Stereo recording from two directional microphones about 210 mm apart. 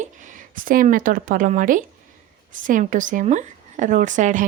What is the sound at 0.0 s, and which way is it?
Speech, 35° right (ahead or behind).